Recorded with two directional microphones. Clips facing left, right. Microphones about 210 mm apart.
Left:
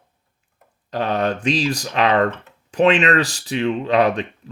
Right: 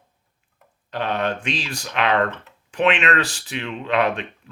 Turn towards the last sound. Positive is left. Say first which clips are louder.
# left 4 dB
turn(degrees=35)  # may be behind; listen again after turning